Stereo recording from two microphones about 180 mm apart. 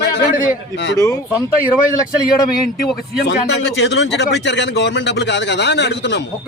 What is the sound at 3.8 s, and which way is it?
A man's voice, 75° left (ahead or behind).